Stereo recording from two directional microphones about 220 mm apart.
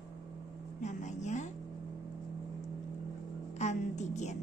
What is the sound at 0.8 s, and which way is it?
Speech, 35° left (ahead or behind).